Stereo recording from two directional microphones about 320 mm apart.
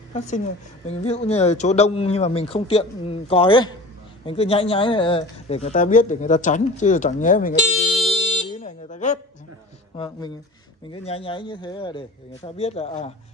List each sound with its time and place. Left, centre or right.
0.8 s a man's voice: centre